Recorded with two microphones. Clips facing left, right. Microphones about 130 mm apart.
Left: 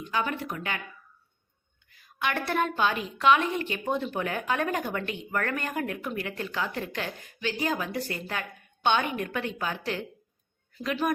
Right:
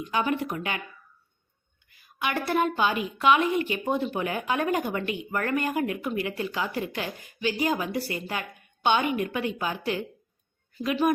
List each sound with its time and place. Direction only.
0.1 s speech: 20° right (ahead or behind)
1.9 s a woman's voice: 5° right (ahead or behind)